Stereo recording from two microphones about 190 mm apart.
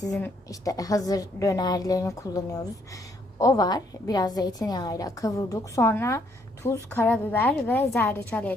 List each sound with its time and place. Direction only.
0.4 s a woman's voice: 20° left (ahead or behind)